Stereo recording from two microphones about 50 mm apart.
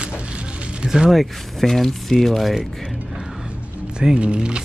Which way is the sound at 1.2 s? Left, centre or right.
Centre.